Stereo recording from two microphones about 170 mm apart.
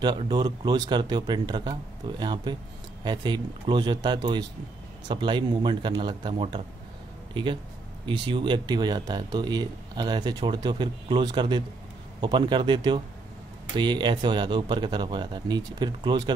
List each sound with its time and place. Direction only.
0.0 s speech: 25° right (ahead or behind)
8.0 s speech: 30° right (ahead or behind)